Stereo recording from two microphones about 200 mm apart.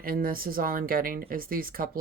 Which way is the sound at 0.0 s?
45° right (ahead or behind).